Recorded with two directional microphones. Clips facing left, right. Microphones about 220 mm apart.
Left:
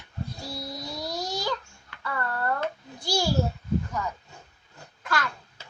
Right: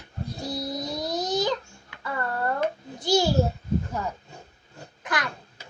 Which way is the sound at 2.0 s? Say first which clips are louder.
Right 2 dB; 20° right (ahead or behind).